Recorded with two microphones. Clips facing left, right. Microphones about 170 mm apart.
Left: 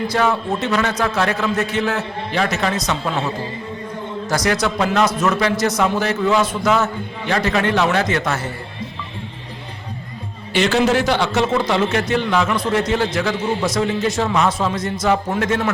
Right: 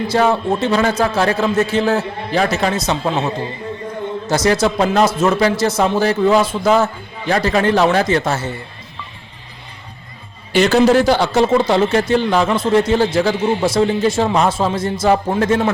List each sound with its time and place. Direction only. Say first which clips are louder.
0.1 s a man's voice: right 6 dB; 30° right (ahead or behind)
10.5 s a man's voice: right 5 dB; 40° right (ahead or behind)